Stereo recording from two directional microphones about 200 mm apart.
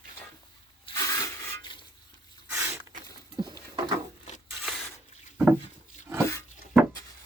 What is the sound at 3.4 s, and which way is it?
Patter, 20° right (ahead or behind).